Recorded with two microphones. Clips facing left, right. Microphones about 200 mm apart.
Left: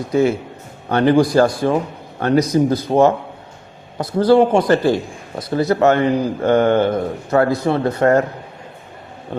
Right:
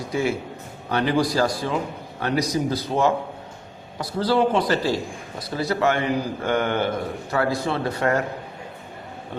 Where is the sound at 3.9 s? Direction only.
50° left (ahead or behind).